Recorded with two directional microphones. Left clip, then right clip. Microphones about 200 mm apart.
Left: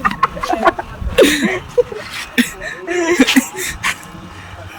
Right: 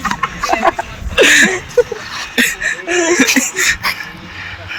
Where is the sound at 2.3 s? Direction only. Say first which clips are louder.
Right 5 dB; 5° left (ahead or behind).